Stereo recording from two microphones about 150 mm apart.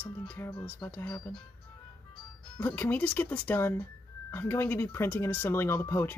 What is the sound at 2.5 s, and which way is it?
Speech, 10° left (ahead or behind).